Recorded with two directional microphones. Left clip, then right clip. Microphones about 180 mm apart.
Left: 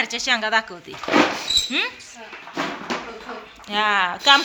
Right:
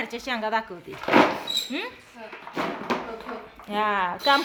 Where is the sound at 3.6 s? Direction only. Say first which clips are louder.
Left 5 dB; 15° right (ahead or behind).